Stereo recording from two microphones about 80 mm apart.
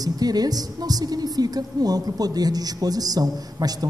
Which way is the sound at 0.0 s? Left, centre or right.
Right.